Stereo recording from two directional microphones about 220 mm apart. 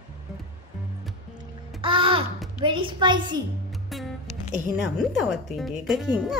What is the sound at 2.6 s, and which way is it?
Speech, 20° right (ahead or behind).